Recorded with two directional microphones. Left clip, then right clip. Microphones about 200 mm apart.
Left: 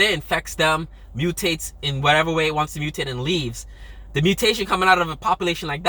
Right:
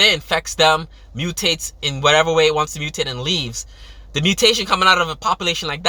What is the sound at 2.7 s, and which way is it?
Speech, 20° right (ahead or behind).